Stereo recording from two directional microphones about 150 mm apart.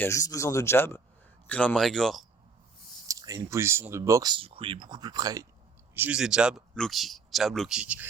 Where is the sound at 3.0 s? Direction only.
25° right (ahead or behind).